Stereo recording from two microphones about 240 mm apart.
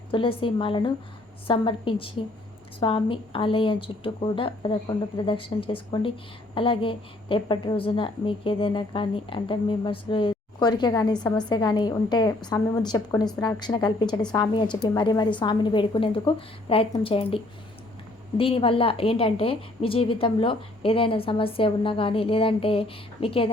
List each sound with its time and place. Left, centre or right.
0.1 s a woman's voice: left